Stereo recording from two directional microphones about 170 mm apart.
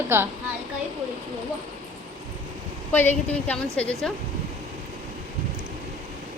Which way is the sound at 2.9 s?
10° left (ahead or behind).